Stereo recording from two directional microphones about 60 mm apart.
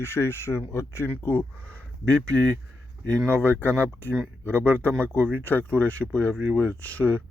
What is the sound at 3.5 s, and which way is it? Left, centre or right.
Speech, left.